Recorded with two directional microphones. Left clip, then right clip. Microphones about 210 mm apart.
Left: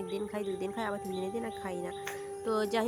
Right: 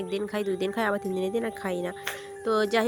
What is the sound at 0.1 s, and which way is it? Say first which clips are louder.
Speech: right 8 dB; 15° right (ahead or behind).